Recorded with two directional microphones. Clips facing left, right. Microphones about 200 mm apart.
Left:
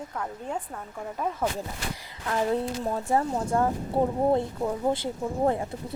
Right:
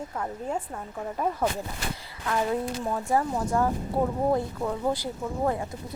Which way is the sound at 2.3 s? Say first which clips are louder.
Left 1 dB; 30° left (ahead or behind).